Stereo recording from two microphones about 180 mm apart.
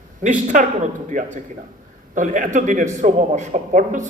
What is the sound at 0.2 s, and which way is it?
Speech, 45° right (ahead or behind).